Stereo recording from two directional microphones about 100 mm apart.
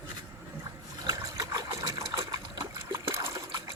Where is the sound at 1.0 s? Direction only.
35° right (ahead or behind).